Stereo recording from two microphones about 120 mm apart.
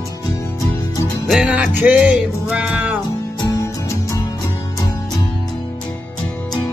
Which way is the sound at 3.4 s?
25° left (ahead or behind).